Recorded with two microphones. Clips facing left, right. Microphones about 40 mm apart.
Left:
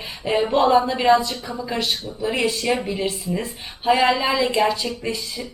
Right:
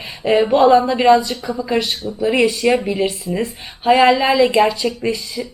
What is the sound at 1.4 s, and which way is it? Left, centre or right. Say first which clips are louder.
Speech: right 6 dB; centre.